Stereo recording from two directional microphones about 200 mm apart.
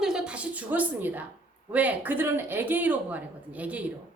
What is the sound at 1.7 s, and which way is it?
Speech, 5° right (ahead or behind).